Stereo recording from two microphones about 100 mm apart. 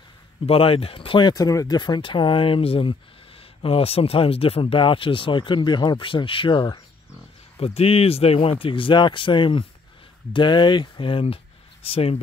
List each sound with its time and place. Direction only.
0.5 s speech: 75° left (ahead or behind); by 1.3 s 60° left (ahead or behind)
1.3 s speech: 35° left (ahead or behind)
1.8 s speech: 50° left (ahead or behind)
3.6 s speech: 80° left; by 6.8 s 50° left (ahead or behind)
7.5 s speech: 75° left (ahead or behind); by 11.3 s 60° left (ahead or behind)
11.8 s speech: 75° left (ahead or behind)